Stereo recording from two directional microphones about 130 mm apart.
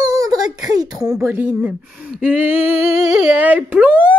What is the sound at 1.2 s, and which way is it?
Speech, 15° right (ahead or behind).